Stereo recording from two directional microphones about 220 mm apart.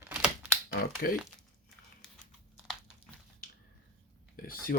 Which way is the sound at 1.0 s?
45° left (ahead or behind).